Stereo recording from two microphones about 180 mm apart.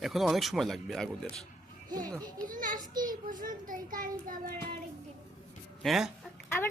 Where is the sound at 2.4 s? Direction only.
45° right (ahead or behind).